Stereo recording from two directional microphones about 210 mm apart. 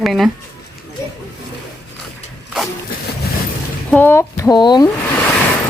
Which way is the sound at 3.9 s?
10° left (ahead or behind).